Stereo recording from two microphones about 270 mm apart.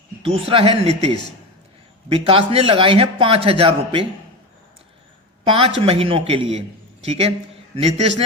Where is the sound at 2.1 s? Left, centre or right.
Right.